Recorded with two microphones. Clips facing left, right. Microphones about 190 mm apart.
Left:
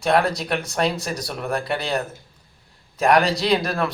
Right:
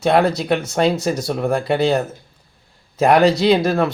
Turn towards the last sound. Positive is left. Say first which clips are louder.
# right 6 dB
turn(degrees=-25)  # may be behind; listen again after turning